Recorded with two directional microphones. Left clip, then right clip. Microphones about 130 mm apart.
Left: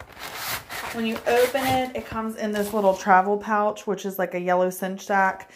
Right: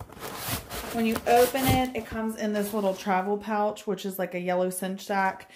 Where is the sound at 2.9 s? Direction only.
Centre (ahead or behind).